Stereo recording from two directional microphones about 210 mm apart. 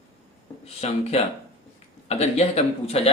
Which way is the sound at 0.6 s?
30° left (ahead or behind).